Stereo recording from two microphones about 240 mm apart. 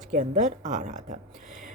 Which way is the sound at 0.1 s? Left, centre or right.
Right.